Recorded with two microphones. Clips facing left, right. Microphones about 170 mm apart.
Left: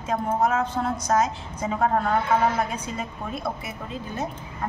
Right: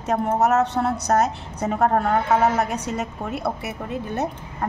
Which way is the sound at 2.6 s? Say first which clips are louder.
Right 4 dB; 75° right (ahead or behind).